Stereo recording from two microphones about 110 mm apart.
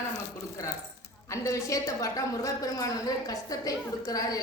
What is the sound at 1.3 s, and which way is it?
A woman's voice, 25° left (ahead or behind).